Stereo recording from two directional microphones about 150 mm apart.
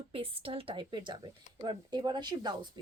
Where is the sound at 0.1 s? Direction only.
40° right (ahead or behind).